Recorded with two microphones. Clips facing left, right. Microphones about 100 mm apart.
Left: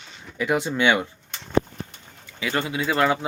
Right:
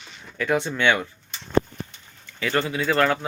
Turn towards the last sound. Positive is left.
turn(degrees=15)  # may be behind; listen again after turning